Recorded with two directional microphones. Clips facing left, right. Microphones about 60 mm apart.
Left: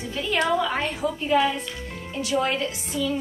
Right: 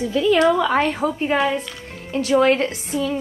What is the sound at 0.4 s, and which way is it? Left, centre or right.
Speech, right.